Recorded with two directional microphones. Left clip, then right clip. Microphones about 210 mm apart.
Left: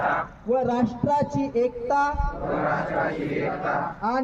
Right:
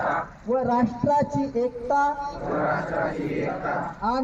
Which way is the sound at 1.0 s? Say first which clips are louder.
Right 1 dB; 30° left (ahead or behind).